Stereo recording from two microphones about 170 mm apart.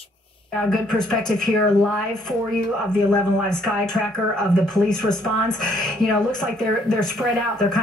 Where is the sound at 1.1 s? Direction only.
5° left (ahead or behind).